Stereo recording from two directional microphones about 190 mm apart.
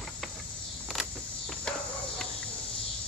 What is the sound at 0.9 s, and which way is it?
Insect, centre (ahead or behind).